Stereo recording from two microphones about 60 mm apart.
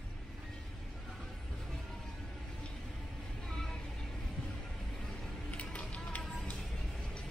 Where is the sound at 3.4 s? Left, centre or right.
Centre.